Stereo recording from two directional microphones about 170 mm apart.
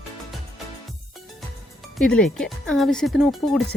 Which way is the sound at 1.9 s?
5° left (ahead or behind).